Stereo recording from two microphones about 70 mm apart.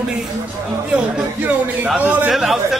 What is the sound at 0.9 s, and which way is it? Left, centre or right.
Speech, right.